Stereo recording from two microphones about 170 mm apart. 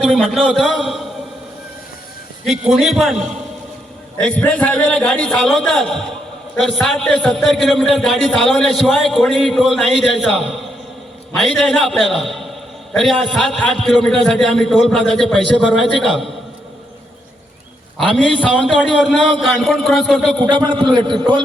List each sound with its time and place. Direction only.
0.0 s a man's voice: centre (ahead or behind)
2.4 s a man's voice: centre (ahead or behind)
17.9 s a man's voice: 5° left (ahead or behind)
20.4 s a man's voice: 25° right (ahead or behind)